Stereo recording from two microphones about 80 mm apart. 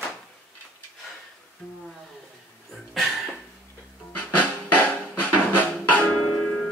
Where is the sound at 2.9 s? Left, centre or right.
Centre.